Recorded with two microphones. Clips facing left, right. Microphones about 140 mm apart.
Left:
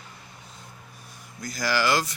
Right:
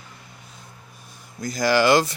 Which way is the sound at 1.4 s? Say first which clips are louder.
Right 7 dB; 20° right (ahead or behind).